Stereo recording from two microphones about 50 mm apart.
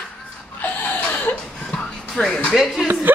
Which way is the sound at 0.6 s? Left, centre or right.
Left.